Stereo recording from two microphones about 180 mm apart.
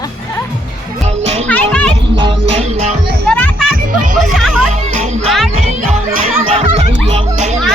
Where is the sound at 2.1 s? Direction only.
30° right (ahead or behind).